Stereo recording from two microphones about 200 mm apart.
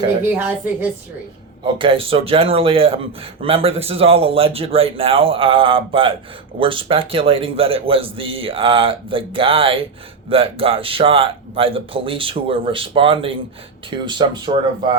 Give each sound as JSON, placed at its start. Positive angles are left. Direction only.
{"t": 0.0, "sound": "a woman's voice", "side_deg": -10}
{"t": 1.6, "sound": "speech", "side_deg": -25}